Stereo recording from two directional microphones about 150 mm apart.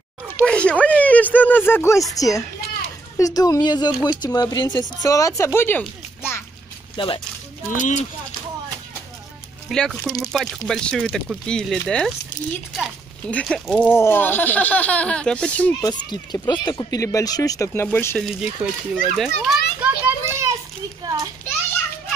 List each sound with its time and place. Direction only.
0.4 s speech: 10° left (ahead or behind)
7.0 s speech: 35° left (ahead or behind)
7.7 s speech: 55° left (ahead or behind)
9.7 s a child's voice: centre (ahead or behind)
13.3 s speech: 5° left (ahead or behind)
15.8 s speech: 30° left (ahead or behind)
17.8 s speech: 10° left (ahead or behind)
18.2 s a child's voice: 5° right (ahead or behind)
19.8 s children playing: 15° right (ahead or behind)